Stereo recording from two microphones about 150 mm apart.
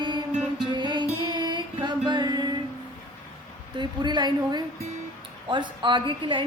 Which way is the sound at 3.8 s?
30° right (ahead or behind).